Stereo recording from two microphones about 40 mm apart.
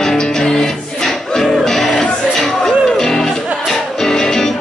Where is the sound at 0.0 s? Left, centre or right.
Centre.